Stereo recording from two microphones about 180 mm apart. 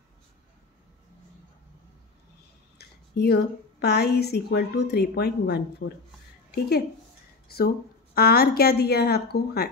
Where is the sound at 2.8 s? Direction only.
65° left (ahead or behind).